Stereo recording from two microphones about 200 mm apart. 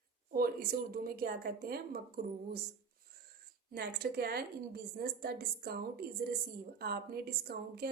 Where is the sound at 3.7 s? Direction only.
50° right (ahead or behind).